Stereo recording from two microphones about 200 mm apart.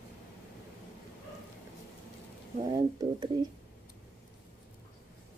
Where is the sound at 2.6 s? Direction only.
20° right (ahead or behind).